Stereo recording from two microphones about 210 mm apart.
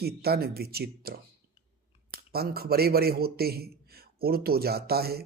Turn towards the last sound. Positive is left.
turn(degrees=-50)  # may be behind; listen again after turning